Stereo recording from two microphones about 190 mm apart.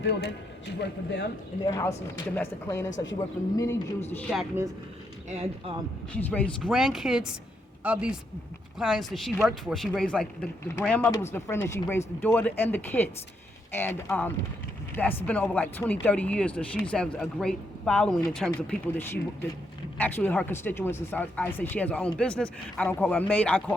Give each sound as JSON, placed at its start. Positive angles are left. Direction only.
{"t": 0.8, "sound": "speech", "side_deg": 60}
{"t": 1.6, "sound": "speech", "side_deg": 15}
{"t": 4.1, "sound": "speech", "side_deg": 5}
{"t": 6.1, "sound": "speech", "side_deg": 10}